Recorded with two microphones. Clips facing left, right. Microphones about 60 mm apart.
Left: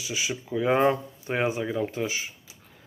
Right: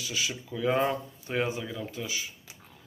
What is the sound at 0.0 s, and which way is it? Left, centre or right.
Speech, centre.